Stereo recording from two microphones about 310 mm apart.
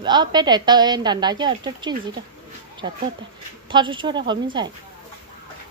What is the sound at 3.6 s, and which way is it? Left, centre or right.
Speech, centre.